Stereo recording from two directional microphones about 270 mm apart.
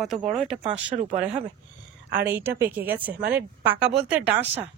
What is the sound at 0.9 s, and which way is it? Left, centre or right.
Speech, right.